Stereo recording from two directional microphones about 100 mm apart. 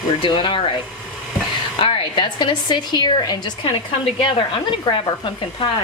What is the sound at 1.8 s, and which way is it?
A woman's voice, 55° left (ahead or behind).